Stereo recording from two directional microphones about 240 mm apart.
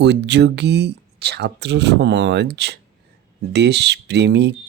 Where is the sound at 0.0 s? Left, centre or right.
Right.